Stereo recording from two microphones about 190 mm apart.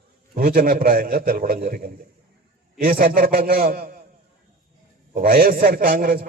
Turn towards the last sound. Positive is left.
turn(degrees=-50)  # may be behind; listen again after turning